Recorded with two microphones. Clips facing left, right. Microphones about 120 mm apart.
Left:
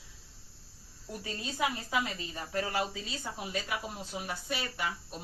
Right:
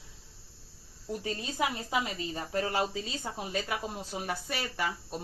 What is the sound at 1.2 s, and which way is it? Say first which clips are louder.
Speech: right 1 dB; 30° right (ahead or behind).